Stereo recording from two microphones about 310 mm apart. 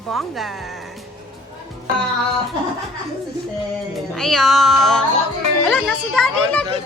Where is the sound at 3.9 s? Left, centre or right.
Centre.